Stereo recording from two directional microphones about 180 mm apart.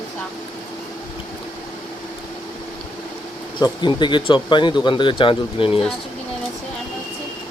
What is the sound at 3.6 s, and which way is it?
Speech, 25° left (ahead or behind).